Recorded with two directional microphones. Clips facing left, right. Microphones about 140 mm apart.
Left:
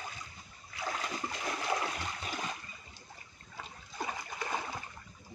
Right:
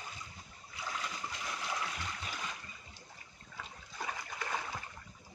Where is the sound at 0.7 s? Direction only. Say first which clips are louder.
Left 4 dB; 55° left (ahead or behind).